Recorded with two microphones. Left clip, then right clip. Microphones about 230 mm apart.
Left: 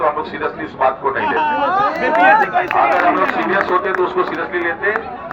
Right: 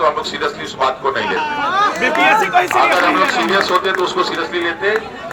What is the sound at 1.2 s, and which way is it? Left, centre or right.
Speech, left.